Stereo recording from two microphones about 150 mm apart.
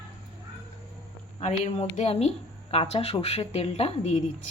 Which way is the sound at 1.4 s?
45° left (ahead or behind).